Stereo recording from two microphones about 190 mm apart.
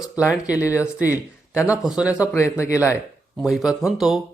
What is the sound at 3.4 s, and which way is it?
Speech, centre (ahead or behind).